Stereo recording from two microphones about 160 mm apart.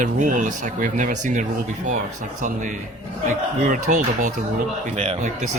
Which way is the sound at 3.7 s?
55° right (ahead or behind).